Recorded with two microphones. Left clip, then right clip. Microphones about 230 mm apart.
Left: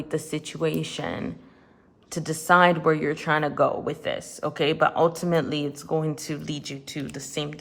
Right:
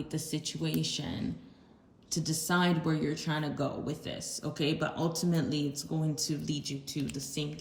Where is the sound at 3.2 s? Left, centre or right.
Centre.